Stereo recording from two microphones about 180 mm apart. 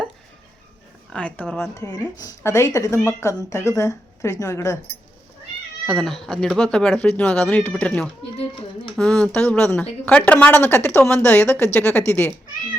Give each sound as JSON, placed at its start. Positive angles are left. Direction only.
{"t": 1.1, "sound": "a woman's voice", "side_deg": 5}
{"t": 5.8, "sound": "a woman's voice", "side_deg": 0}